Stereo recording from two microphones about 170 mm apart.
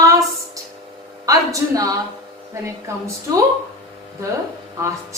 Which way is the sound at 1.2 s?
20° right (ahead or behind).